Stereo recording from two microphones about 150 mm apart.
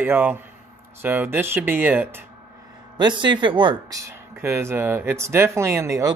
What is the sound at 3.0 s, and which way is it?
Speech, 30° right (ahead or behind).